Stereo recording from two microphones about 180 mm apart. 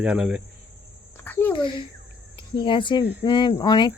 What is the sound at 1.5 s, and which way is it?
A child's voice, 25° left (ahead or behind).